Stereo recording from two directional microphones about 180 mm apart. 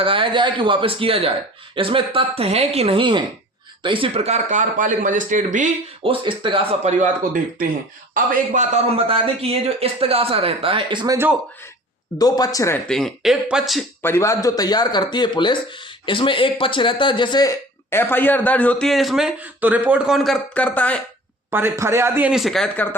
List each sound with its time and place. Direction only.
0.0 s speech: 30° right (ahead or behind); by 5.6 s 45° right (ahead or behind)
6.0 s speech: 30° right (ahead or behind)
8.1 s a man's voice: 40° right (ahead or behind); by 11.3 s 20° right (ahead or behind)
12.2 s speech: 20° left (ahead or behind)
12.9 s speech: 5° left (ahead or behind)
14.0 s speech: 15° left (ahead or behind)
17.9 s a man's voice: 10° left (ahead or behind)
21.5 s speech: 15° right (ahead or behind); by 23.0 s 5° left (ahead or behind)